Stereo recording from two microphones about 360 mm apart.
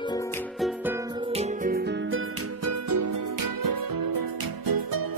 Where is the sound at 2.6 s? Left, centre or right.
Right.